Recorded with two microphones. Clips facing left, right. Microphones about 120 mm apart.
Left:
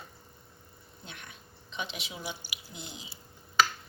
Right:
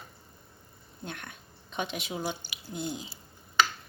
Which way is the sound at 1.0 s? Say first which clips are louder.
Right 7 dB; 50° right (ahead or behind).